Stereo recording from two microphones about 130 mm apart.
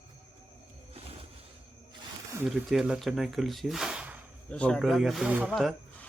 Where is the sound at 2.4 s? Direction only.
5° right (ahead or behind).